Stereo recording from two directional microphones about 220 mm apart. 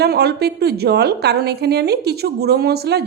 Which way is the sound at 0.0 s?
45° right (ahead or behind).